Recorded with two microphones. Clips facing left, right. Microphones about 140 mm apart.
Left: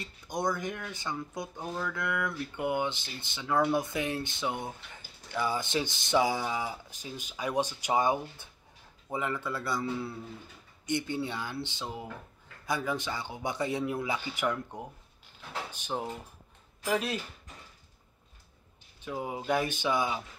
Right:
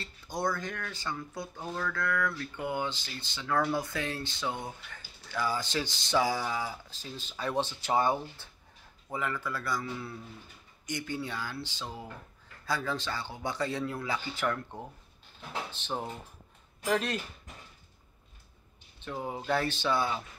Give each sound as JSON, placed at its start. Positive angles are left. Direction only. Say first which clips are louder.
{"t": 0.0, "sound": "speech", "louder": "left 1 dB", "side_deg": 20}
{"t": 19.0, "sound": "speech", "louder": "left 1 dB", "side_deg": 10}